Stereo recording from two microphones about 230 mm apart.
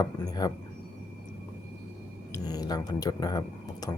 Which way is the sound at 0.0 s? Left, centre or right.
Centre.